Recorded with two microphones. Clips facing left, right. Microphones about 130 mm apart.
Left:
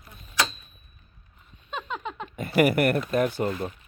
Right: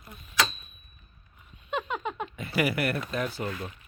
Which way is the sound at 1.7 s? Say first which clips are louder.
Right 2 dB; 5° right (ahead or behind).